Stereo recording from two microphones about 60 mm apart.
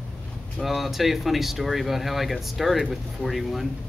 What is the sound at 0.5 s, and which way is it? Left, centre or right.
A man's voice, centre.